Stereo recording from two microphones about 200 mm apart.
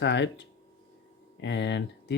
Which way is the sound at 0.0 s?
60° left (ahead or behind).